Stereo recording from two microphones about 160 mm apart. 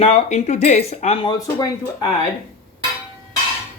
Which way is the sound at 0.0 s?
45° left (ahead or behind).